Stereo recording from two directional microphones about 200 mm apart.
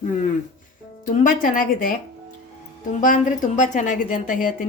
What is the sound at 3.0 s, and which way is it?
A woman's voice, 40° left (ahead or behind).